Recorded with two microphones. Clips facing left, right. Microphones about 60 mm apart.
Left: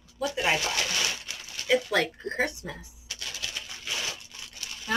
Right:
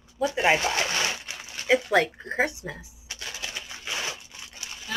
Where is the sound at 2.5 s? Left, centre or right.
Right.